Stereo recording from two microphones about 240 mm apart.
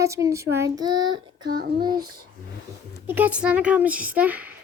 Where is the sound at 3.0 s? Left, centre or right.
Centre.